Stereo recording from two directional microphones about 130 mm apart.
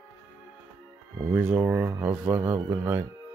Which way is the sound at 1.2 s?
10° right (ahead or behind).